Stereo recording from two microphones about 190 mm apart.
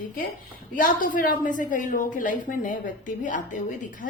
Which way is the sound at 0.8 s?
45° left (ahead or behind).